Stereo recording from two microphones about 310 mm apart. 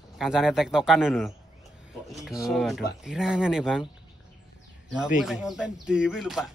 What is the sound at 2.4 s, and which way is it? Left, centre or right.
A man's voice, centre.